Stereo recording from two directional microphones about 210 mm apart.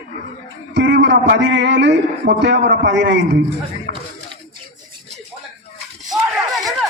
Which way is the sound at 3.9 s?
45° right (ahead or behind).